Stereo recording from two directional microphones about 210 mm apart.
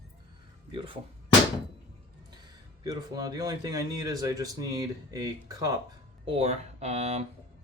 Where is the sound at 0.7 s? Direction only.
25° right (ahead or behind).